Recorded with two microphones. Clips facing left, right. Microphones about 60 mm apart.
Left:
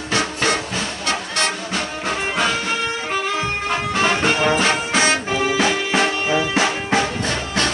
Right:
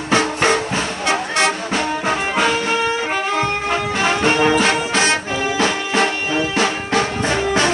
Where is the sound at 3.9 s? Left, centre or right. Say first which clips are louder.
Right 1 dB; centre.